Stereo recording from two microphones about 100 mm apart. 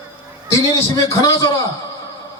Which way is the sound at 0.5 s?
40° left (ahead or behind).